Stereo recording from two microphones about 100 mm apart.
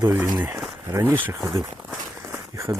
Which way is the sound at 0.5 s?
30° right (ahead or behind).